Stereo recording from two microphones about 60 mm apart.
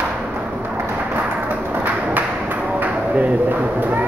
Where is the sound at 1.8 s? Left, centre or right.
Right.